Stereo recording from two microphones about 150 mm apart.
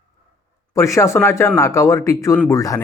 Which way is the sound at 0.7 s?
20° left (ahead or behind).